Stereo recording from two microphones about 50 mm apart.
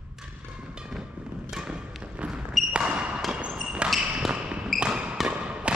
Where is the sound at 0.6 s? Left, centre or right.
Centre.